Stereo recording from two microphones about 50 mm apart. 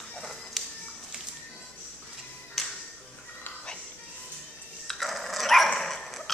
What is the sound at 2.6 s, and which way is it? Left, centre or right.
Music, centre.